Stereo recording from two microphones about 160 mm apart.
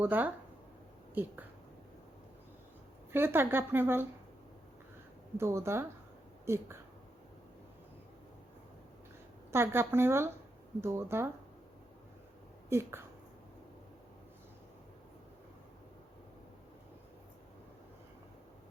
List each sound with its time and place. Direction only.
0.0 s speech: 10° right (ahead or behind)
3.1 s speech: 15° right (ahead or behind)
5.4 s speech: 15° right (ahead or behind)
9.5 s speech: 15° right (ahead or behind)